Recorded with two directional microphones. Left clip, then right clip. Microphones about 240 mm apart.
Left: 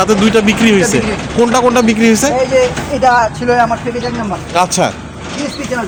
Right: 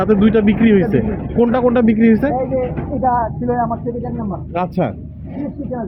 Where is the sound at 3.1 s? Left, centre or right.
Left.